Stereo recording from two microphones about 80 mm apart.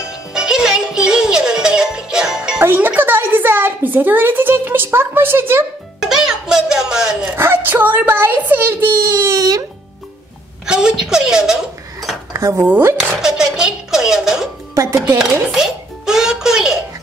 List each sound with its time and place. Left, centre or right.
0.3 s music: centre
2.6 s a woman's voice: right
5.9 s music: centre
7.3 s speech: right
9.4 s a child's voice: right
10.7 s a woman's voice: centre
12.3 s dishes: right
12.6 s speech: right
13.1 s a sound: centre
14.8 s speech: right
15.5 s music: centre